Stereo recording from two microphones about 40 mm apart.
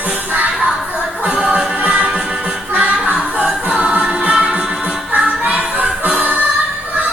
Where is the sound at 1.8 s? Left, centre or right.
Right.